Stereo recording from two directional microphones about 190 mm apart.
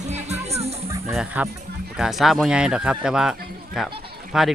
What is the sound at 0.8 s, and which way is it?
Music, 15° right (ahead or behind).